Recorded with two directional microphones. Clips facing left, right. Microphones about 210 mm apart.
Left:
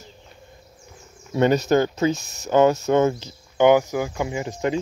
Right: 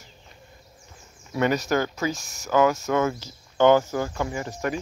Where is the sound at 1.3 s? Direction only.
25° left (ahead or behind).